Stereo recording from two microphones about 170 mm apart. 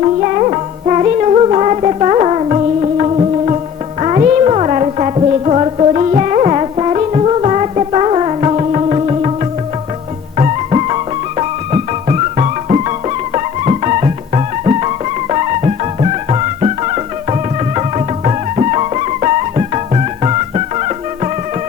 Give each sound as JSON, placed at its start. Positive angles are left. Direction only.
{"t": 0.3, "sound": "music", "side_deg": -30}
{"t": 10.3, "sound": "music", "side_deg": -35}